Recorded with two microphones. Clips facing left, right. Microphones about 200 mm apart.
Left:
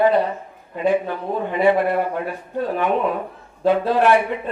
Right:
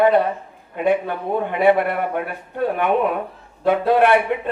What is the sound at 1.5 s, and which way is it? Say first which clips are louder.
Speech: even; 60° right (ahead or behind).